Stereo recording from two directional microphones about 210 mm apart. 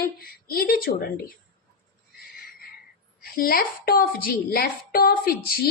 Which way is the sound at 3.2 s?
45° left (ahead or behind).